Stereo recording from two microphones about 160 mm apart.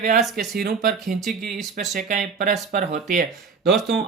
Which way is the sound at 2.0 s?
55° right (ahead or behind).